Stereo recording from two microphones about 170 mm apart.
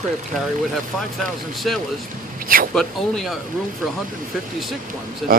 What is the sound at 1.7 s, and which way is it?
Speech, centre (ahead or behind).